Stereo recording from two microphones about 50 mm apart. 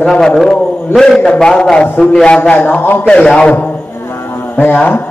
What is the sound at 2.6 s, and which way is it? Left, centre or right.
Speech, left.